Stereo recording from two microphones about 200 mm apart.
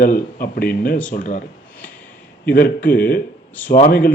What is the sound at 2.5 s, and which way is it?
Speech, 45° left (ahead or behind).